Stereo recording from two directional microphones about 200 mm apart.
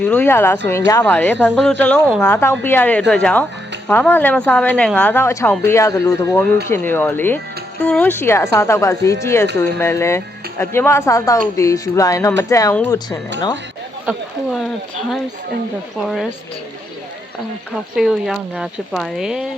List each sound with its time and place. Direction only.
0.0 s speech: 5° left (ahead or behind)
2.3 s speech: 10° left (ahead or behind)
14.0 s speech: centre (ahead or behind)
16.0 s speech: centre (ahead or behind)
17.7 s speech: centre (ahead or behind)